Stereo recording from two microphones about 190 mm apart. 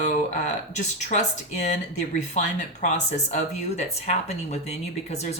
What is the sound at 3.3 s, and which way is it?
Speech, 35° left (ahead or behind).